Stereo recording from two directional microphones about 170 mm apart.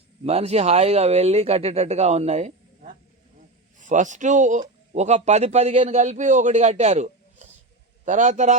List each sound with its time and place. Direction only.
0.3 s speech: 40° right (ahead or behind)